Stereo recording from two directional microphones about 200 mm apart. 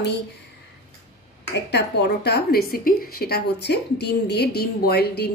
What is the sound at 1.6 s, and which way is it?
A woman's voice, 55° left (ahead or behind).